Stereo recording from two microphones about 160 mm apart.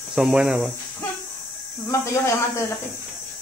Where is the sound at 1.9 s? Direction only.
20° left (ahead or behind).